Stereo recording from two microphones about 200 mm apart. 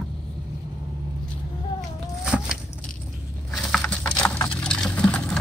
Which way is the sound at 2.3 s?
Centre (ahead or behind).